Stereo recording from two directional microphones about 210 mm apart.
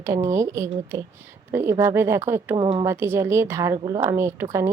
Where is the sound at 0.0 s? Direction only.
15° right (ahead or behind).